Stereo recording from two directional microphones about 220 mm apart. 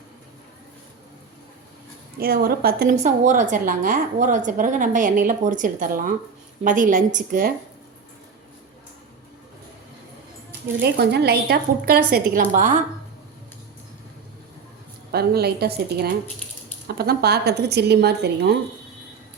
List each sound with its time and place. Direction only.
2.1 s a woman's voice: 45° right (ahead or behind)
10.8 s a woman's voice: 50° right (ahead or behind); by 12.8 s 35° right (ahead or behind)
15.1 s a woman's voice: 45° right (ahead or behind)